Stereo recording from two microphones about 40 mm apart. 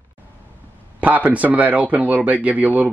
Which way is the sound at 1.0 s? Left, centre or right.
Right.